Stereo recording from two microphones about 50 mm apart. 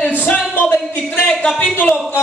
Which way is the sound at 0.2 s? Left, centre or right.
Left.